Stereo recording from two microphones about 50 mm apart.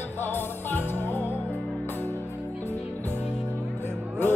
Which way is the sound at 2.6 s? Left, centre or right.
Left.